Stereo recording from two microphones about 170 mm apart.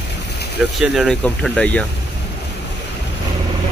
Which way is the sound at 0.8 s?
Centre (ahead or behind).